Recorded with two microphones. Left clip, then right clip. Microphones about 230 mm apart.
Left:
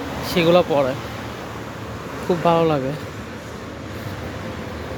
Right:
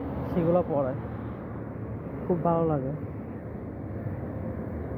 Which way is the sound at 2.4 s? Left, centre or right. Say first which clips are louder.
Left 9 dB; left.